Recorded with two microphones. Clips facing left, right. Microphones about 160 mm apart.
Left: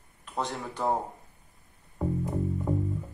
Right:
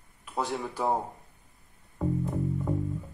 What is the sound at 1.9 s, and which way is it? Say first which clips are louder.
Music: even; 15° left (ahead or behind).